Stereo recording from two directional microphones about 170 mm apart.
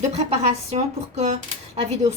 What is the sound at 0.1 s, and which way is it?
Speech, 40° right (ahead or behind).